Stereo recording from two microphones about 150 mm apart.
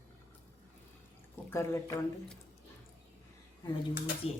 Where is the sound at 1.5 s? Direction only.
20° left (ahead or behind).